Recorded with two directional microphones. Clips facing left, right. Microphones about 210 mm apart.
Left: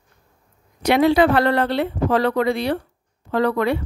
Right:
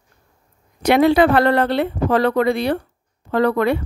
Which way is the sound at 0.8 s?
55° right (ahead or behind).